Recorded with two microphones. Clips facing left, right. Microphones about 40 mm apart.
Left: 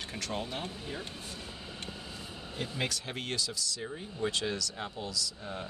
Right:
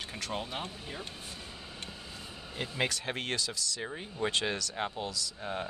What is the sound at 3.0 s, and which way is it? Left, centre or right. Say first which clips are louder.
Speech: right 2 dB; right.